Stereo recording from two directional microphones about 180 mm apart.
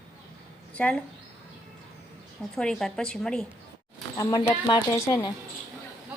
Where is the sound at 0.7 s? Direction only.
5° left (ahead or behind).